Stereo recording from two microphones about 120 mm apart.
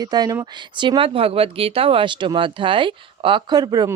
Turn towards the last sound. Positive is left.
turn(degrees=-30)  # may be behind; listen again after turning